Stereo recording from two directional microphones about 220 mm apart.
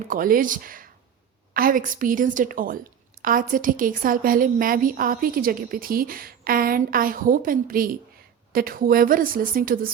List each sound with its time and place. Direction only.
0.1 s a woman's voice: 40° right (ahead or behind)